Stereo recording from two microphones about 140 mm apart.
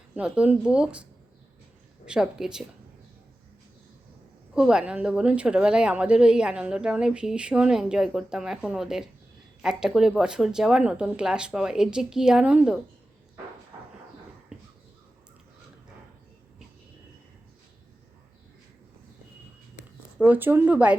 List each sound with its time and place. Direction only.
0.2 s speech: 10° right (ahead or behind)
2.0 s speech: 5° right (ahead or behind)
4.5 s speech: 5° right (ahead or behind)
20.1 s speech: 10° right (ahead or behind)